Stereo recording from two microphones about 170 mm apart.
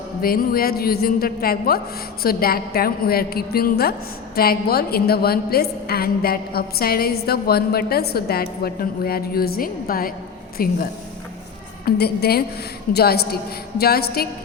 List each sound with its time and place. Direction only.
0.2 s a woman's voice: 60° left (ahead or behind)
11.9 s a woman's voice: 70° left (ahead or behind)